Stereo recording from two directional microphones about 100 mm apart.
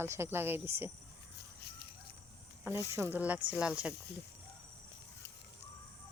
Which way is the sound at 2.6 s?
25° right (ahead or behind).